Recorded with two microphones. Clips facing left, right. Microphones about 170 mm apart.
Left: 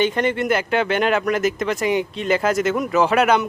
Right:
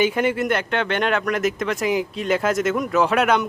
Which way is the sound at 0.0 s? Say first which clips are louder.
Even; 5° right (ahead or behind).